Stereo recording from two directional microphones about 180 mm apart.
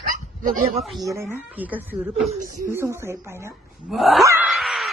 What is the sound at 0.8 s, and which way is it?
Speech, centre (ahead or behind).